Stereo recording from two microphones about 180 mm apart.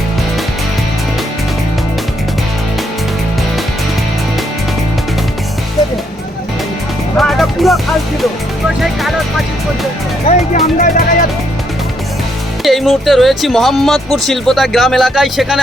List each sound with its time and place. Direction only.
7.2 s music: centre (ahead or behind)
8.8 s music: centre (ahead or behind)
10.8 s music: 50° left (ahead or behind)
12.6 s speech: centre (ahead or behind)